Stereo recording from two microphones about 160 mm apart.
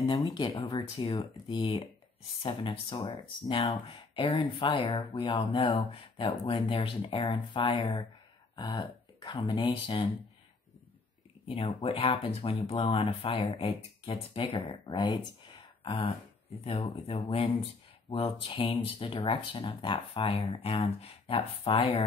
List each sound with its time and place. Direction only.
0.0 s speech: 30° left (ahead or behind)
11.4 s speech: 35° left (ahead or behind)